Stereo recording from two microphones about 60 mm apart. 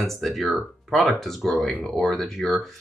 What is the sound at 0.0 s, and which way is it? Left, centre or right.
Speech, centre.